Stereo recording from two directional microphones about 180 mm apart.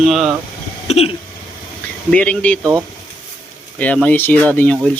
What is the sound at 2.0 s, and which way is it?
Speech, 5° left (ahead or behind).